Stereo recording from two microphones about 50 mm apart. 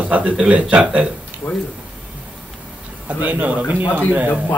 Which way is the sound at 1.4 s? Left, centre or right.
Left.